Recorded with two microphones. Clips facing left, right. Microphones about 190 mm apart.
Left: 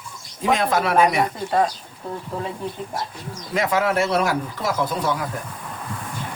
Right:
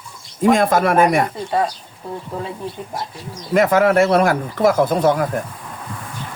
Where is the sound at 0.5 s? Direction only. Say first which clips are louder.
Right 1 dB; 50° right (ahead or behind).